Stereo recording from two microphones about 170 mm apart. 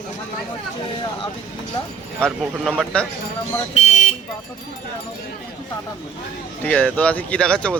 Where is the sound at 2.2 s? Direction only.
Centre (ahead or behind).